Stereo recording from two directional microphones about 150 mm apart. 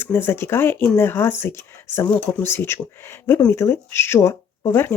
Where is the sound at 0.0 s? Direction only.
15° left (ahead or behind).